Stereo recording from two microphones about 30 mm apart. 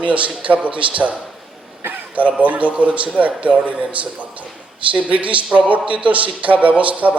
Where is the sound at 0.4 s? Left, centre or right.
Right.